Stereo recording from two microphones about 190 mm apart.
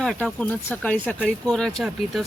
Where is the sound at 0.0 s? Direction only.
5° left (ahead or behind).